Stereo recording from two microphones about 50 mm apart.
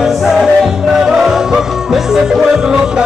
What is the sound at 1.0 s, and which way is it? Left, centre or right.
Music, centre.